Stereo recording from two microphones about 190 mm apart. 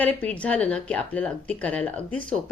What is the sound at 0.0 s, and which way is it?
Speech, 5° left (ahead or behind).